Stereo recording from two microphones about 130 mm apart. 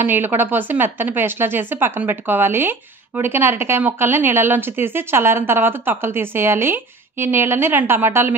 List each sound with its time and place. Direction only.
0.0 s a woman's voice: 15° right (ahead or behind)